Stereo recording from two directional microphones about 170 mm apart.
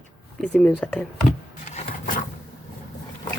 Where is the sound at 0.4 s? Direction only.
5° left (ahead or behind).